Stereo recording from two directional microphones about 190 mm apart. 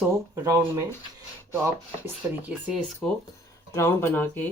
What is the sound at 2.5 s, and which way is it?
Speech, 5° right (ahead or behind).